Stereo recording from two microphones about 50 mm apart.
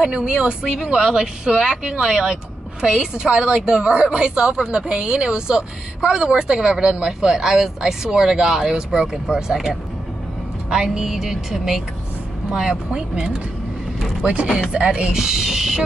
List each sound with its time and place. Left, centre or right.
0.0 s a woman's voice: centre
10.7 s a woman's voice: centre